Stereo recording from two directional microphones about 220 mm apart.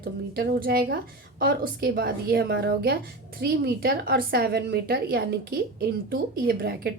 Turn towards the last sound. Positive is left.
turn(degrees=-45)  # may be behind; listen again after turning